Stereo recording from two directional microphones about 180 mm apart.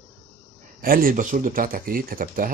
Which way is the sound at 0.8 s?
50° right (ahead or behind).